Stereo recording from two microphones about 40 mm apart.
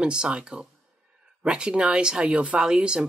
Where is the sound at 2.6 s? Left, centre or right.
Centre.